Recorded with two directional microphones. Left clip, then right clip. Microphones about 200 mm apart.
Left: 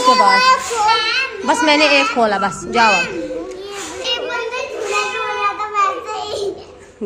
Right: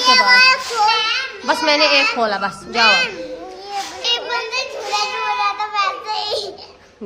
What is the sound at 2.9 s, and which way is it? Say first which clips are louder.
Speech: right 1 dB; 35° right (ahead or behind).